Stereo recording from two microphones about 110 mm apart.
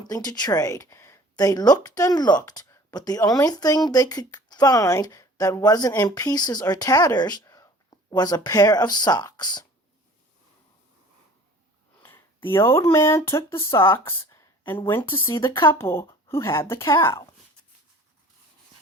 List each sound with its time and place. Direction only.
0.0 s speech: 35° left (ahead or behind)
12.0 s speech: 20° left (ahead or behind)